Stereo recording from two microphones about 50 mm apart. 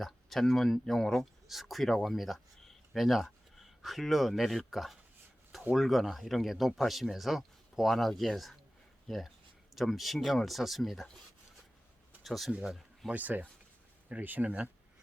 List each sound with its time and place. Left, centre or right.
0.0 s speech: centre
12.2 s speech: centre
13.1 s speech: right